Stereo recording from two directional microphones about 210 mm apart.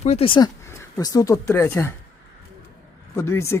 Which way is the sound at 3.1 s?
10° left (ahead or behind).